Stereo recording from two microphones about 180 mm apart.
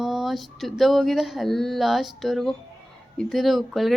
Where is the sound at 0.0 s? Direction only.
Centre (ahead or behind).